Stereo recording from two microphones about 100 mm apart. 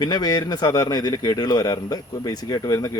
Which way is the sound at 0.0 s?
40° left (ahead or behind).